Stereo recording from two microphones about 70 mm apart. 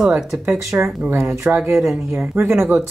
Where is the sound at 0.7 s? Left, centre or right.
Right.